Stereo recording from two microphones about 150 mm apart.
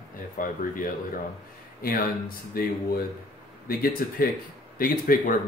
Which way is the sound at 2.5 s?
75° left (ahead or behind).